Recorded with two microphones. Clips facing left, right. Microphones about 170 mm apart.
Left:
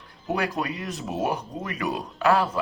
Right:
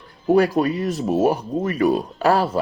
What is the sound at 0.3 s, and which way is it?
Speech, 35° right (ahead or behind).